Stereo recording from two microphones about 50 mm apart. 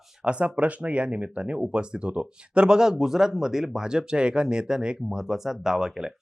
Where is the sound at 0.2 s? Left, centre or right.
Right.